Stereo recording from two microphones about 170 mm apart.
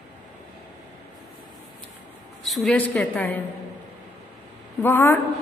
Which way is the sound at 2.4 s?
Centre (ahead or behind).